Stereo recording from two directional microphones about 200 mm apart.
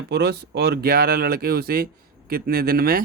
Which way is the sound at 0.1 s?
55° right (ahead or behind).